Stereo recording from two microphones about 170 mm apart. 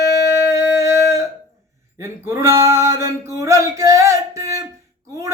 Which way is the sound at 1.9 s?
15° right (ahead or behind).